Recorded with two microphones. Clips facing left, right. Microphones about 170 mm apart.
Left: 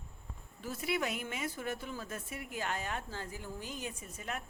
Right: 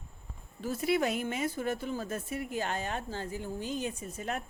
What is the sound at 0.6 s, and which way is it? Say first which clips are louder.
A woman's voice: right 6 dB; 35° right (ahead or behind).